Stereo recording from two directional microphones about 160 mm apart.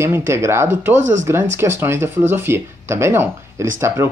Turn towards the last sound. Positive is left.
turn(degrees=-15)  # may be behind; listen again after turning